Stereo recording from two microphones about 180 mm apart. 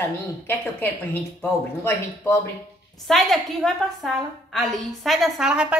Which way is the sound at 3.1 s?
Centre (ahead or behind).